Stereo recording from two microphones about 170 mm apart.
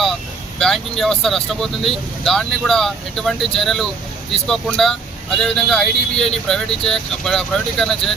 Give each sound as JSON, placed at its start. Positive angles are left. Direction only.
{"t": 0.6, "sound": "speech", "side_deg": 0}